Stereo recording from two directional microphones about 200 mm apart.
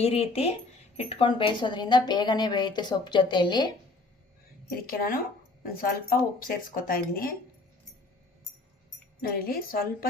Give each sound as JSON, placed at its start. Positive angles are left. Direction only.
{"t": 0.0, "sound": "a woman's voice", "side_deg": 30}
{"t": 4.9, "sound": "speech", "side_deg": 45}
{"t": 9.2, "sound": "speech", "side_deg": 50}